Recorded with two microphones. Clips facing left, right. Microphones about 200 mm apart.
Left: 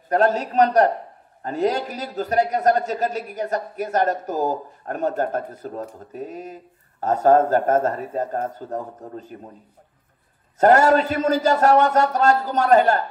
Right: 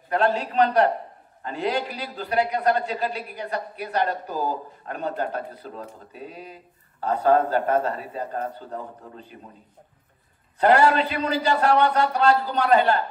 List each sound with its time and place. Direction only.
0.1 s a man's voice: 40° left (ahead or behind)
10.6 s a man's voice: 45° left (ahead or behind)